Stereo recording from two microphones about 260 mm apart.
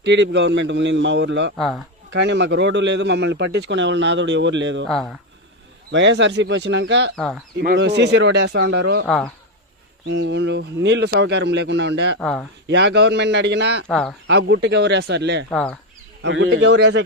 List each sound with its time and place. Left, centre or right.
0.0 s a man's voice: right
1.5 s speech: centre
2.0 s a man's voice: right
4.9 s speech: centre
5.9 s a man's voice: right
9.0 s speech: centre
10.1 s a man's voice: right
12.2 s speech: centre
12.6 s a man's voice: right
13.8 s speech: centre
14.3 s a man's voice: right
15.4 s speech: centre
16.2 s a man's voice: right